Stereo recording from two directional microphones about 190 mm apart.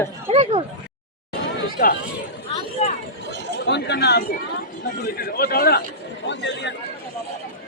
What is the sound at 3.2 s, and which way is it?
Chatter, 65° right (ahead or behind).